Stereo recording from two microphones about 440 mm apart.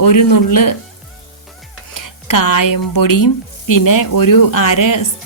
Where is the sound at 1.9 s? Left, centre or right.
Left.